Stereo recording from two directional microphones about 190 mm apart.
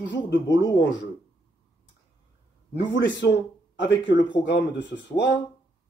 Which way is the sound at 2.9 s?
70° left (ahead or behind).